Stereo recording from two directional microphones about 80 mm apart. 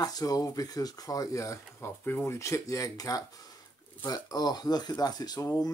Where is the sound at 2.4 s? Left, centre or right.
Left.